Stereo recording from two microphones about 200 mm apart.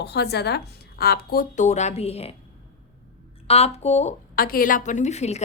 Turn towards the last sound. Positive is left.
turn(degrees=35)  # may be behind; listen again after turning